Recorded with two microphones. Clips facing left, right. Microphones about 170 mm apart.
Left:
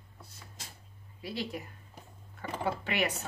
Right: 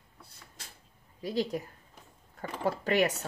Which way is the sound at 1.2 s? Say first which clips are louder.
Right 6 dB; 40° right (ahead or behind).